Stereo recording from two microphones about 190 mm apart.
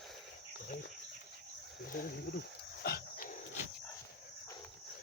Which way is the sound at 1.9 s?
45° left (ahead or behind).